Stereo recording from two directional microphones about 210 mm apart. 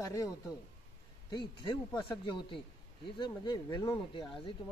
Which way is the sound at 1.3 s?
20° left (ahead or behind).